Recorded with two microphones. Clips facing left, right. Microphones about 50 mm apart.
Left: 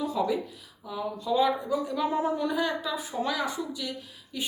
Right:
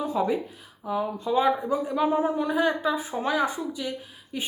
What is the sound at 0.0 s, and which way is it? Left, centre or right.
A woman's voice, right.